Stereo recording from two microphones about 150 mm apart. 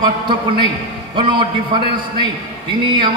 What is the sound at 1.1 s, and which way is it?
Speech, 35° right (ahead or behind).